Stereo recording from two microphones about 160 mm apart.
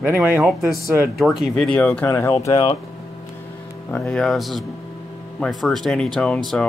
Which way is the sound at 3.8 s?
5° left (ahead or behind).